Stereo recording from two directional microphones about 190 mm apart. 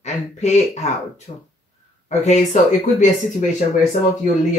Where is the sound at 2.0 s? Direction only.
35° left (ahead or behind).